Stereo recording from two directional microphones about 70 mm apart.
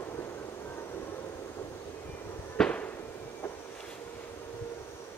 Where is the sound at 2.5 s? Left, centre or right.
Centre.